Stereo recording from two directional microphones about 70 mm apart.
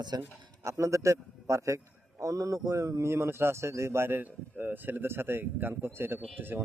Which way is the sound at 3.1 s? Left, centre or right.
Right.